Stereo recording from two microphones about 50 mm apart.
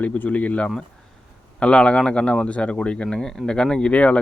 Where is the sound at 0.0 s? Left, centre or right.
Left.